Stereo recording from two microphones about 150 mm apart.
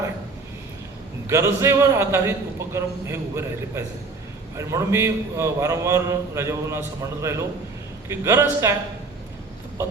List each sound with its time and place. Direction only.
1.3 s a man's voice: 20° right (ahead or behind)